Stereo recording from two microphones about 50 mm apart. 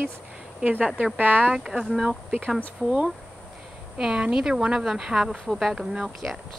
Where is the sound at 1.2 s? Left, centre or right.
Right.